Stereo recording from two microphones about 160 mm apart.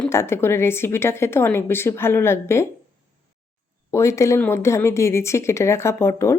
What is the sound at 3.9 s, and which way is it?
A woman's voice, 20° left (ahead or behind).